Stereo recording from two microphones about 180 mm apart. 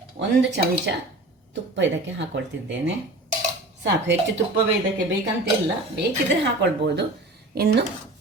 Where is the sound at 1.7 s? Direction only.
80° right.